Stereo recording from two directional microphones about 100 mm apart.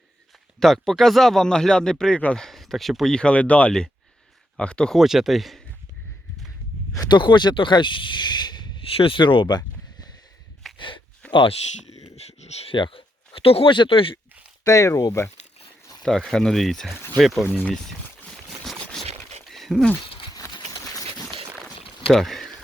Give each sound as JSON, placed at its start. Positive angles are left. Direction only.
{"t": 0.6, "sound": "speech", "side_deg": 5}
{"t": 4.9, "sound": "speech", "side_deg": -5}
{"t": 7.0, "sound": "speech", "side_deg": 50}
{"t": 9.0, "sound": "speech", "side_deg": 55}
{"t": 10.8, "sound": "a sound", "side_deg": 55}
{"t": 11.3, "sound": "speech", "side_deg": 55}
{"t": 12.0, "sound": "a sound", "side_deg": 90}
{"t": 12.7, "sound": "speech", "side_deg": 60}
{"t": 13.7, "sound": "speech", "side_deg": 60}
{"t": 14.6, "sound": "speech", "side_deg": 35}
{"t": 16.0, "sound": "speech", "side_deg": 5}
{"t": 18.4, "sound": "a sound", "side_deg": 0}
{"t": 20.1, "sound": "a sound", "side_deg": 60}
{"t": 22.1, "sound": "speech", "side_deg": 0}